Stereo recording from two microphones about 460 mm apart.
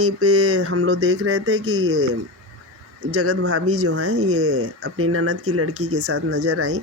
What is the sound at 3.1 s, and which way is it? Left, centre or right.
Speech, right.